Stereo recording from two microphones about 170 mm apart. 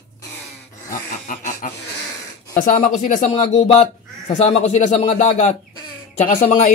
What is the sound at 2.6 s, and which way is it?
Speech, 55° left (ahead or behind).